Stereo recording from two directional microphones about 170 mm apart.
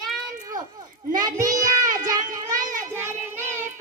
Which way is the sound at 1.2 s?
20° right (ahead or behind).